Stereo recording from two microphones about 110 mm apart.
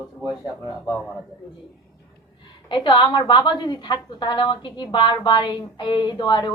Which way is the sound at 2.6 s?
45° left (ahead or behind).